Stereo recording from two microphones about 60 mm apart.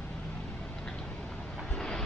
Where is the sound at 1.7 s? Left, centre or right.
Centre.